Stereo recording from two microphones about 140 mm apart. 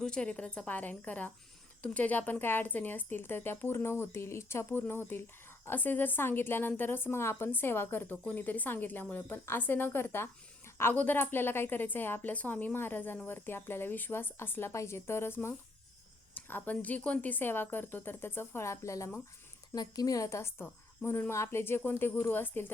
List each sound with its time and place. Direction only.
0.0 s a woman's voice: 5° left (ahead or behind)